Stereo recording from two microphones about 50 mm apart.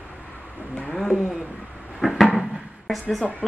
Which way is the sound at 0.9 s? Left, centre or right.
Centre.